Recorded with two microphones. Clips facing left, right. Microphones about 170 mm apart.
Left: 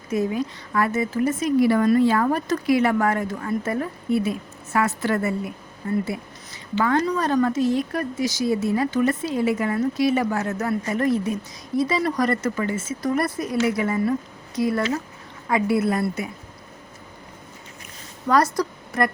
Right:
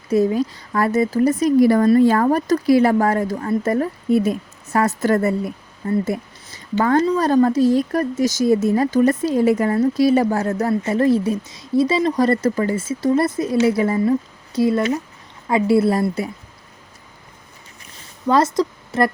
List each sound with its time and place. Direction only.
0.1 s a woman's voice: 35° right (ahead or behind)
7.0 s a woman's voice: 30° right (ahead or behind)
18.3 s a woman's voice: 25° right (ahead or behind)